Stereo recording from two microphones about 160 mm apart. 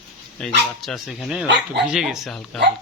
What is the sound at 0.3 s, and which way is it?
Speech, 5° left (ahead or behind).